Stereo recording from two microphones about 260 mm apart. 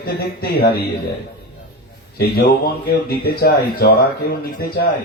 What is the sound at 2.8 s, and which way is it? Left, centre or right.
A man's voice, left.